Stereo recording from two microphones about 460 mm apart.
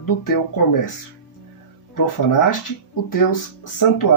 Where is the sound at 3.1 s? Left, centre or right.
Left.